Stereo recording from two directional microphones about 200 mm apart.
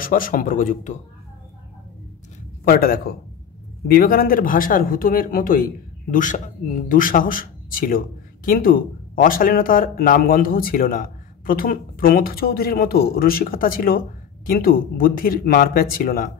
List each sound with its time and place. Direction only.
0.0 s speech: 45° left (ahead or behind)
2.6 s speech: 45° left (ahead or behind)